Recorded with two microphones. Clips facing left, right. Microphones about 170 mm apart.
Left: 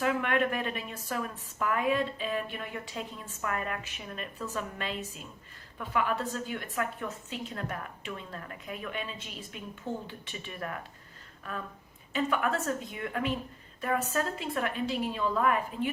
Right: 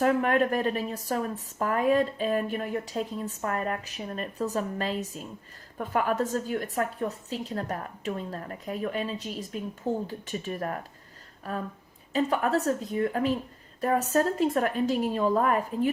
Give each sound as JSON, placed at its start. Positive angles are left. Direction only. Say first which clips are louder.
{"t": 0.0, "sound": "a woman's voice", "louder": "right 5 dB", "side_deg": -40}